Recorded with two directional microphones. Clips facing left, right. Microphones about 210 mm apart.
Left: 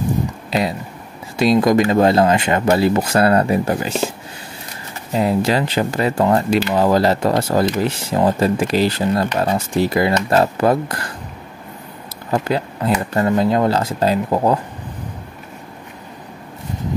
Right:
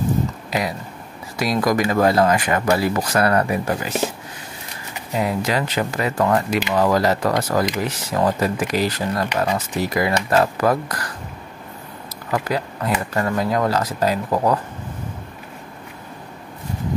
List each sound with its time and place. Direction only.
0.5 s speech: 25° left (ahead or behind)
5.1 s speech: 30° left (ahead or behind)
12.3 s speech: 25° left (ahead or behind)